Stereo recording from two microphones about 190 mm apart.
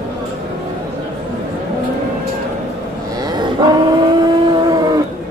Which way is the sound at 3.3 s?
25° right (ahead or behind).